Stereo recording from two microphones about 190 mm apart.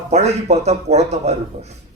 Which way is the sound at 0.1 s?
35° right (ahead or behind).